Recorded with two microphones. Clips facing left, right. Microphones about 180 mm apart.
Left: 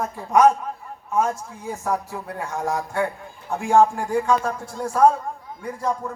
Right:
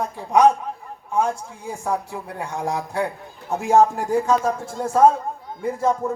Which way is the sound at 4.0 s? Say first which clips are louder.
Right 1 dB; 40° right (ahead or behind).